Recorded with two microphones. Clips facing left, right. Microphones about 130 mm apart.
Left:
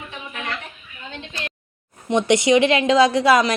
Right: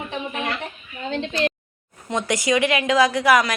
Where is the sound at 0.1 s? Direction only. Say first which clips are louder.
Right 5 dB; 30° right (ahead or behind).